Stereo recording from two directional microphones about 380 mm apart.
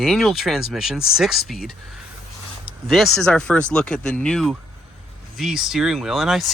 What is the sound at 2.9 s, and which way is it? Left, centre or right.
Speech, centre.